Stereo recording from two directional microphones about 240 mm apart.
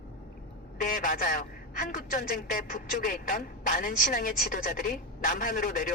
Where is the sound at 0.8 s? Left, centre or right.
Left.